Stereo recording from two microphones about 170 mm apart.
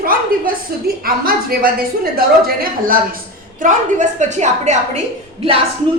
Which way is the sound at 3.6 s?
45° right (ahead or behind).